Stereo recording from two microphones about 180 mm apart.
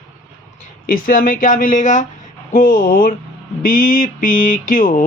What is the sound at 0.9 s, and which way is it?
Speech, 50° left (ahead or behind).